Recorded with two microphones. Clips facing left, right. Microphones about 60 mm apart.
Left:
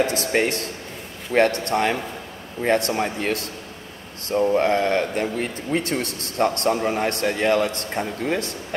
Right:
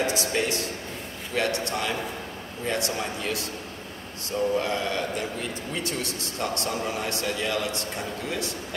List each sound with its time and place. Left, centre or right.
0.0 s speech: left